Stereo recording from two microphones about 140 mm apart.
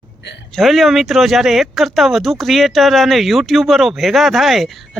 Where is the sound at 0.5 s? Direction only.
Centre (ahead or behind).